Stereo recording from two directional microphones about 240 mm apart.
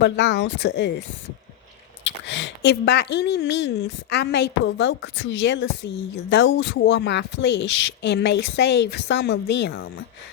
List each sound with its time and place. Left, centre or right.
0.0 s speech: left
2.0 s speech: left